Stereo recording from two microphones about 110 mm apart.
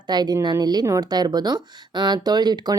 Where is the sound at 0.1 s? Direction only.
40° right (ahead or behind).